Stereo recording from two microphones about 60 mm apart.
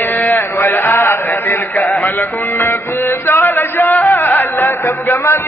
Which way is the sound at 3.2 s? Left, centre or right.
Left.